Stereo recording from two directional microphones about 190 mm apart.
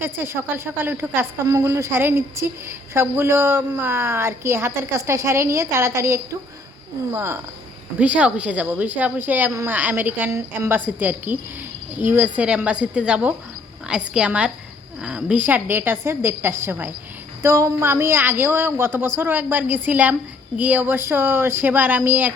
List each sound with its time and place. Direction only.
0.0 s a woman's voice: 10° right (ahead or behind)